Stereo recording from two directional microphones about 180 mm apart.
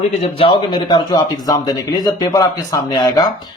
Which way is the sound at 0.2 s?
30° left (ahead or behind).